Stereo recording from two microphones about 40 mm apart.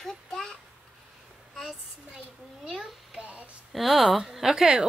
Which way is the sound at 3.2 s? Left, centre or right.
Right.